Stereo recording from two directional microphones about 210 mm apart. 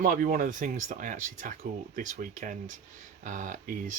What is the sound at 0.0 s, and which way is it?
Speech, 40° right (ahead or behind).